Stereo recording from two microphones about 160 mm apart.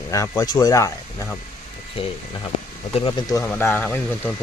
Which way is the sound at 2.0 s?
35° left (ahead or behind).